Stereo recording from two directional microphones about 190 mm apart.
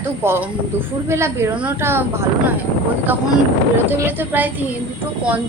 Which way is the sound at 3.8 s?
10° right (ahead or behind).